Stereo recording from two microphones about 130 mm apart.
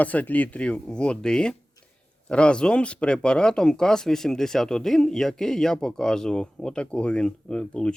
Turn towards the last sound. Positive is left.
turn(degrees=5)  # may be behind; listen again after turning